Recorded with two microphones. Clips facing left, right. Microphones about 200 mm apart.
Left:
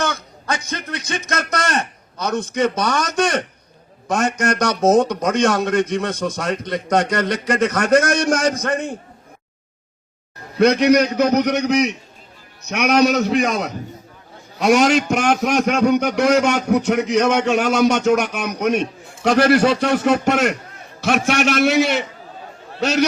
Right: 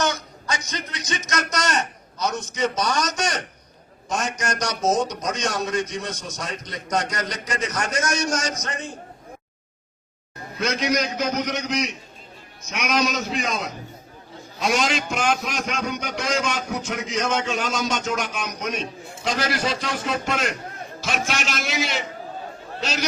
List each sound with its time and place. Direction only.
0.0 s a man's voice: 55° left (ahead or behind)
10.6 s a man's voice: 65° left (ahead or behind)
22.8 s a man's voice: 65° left (ahead or behind)